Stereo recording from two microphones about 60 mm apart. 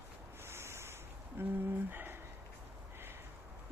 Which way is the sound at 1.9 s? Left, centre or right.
Right.